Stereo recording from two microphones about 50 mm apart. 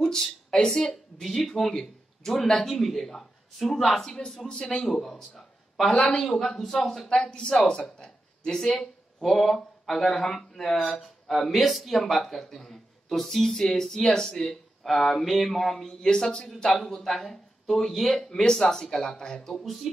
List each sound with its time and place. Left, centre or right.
0.0 s a sound: centre
1.2 s a man's voice: centre
7.1 s speech: centre
19.6 s speech: centre